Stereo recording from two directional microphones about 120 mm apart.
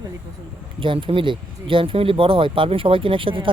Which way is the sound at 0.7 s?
45° right (ahead or behind).